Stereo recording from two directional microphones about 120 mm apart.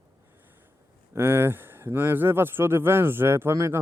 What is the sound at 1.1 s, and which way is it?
A man's voice, 20° right (ahead or behind).